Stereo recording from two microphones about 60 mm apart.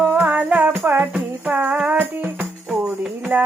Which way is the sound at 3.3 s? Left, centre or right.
Right.